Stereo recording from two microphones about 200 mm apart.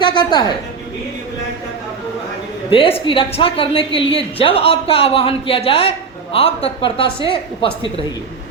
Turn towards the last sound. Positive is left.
turn(degrees=25)  # may be behind; listen again after turning